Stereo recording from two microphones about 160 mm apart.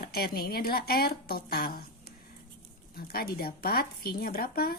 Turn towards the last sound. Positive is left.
turn(degrees=70)  # may be behind; listen again after turning